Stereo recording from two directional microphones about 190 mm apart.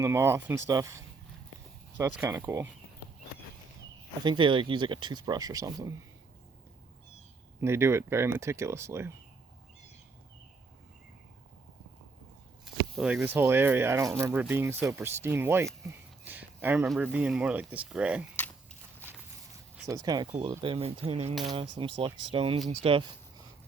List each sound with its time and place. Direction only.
0.0 s speech: 15° right (ahead or behind)
2.1 s speech: 10° right (ahead or behind)
4.2 s speech: 25° right (ahead or behind)
7.6 s speech: 15° right (ahead or behind)
12.6 s speech: centre (ahead or behind)
19.9 s speech: 20° right (ahead or behind)